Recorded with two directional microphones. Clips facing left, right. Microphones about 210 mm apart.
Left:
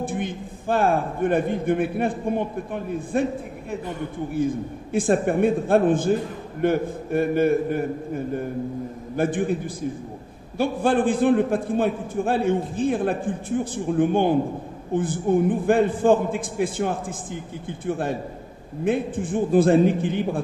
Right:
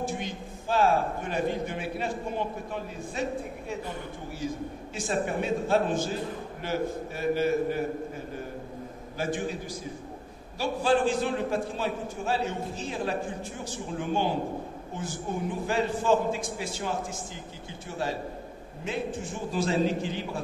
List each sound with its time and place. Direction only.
0.0 s a man's voice: 55° left (ahead or behind)
4.3 s a man's voice: 55° left (ahead or behind)
10.6 s a man's voice: 55° left (ahead or behind)